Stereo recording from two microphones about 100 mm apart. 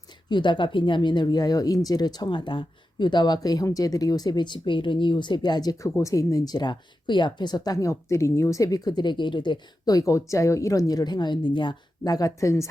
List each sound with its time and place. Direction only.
0.3 s speech: 50° left (ahead or behind); by 12.6 s 30° left (ahead or behind)